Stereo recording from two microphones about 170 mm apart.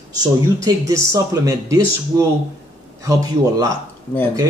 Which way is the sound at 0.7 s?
20° right (ahead or behind).